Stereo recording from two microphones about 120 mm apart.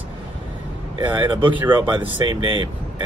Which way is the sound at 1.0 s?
40° right (ahead or behind).